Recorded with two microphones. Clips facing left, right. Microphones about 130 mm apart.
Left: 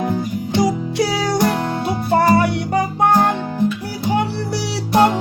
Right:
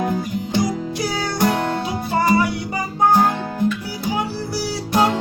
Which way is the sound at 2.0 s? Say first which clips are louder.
Left 3 dB; 60° left (ahead or behind).